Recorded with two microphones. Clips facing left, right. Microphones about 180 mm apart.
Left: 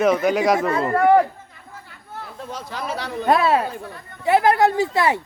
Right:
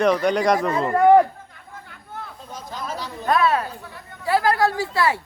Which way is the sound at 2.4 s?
75° left (ahead or behind).